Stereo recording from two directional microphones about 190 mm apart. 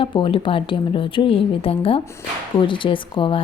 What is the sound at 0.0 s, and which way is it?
A woman's voice, 25° left (ahead or behind).